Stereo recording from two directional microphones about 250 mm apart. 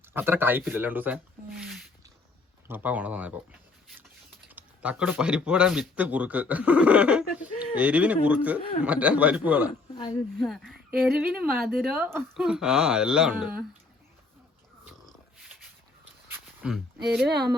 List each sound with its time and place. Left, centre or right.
0.1 s speech: centre
4.4 s speech: centre
9.6 s speech: centre
10.3 s speech: centre
15.0 s dog: centre
16.3 s a sound: centre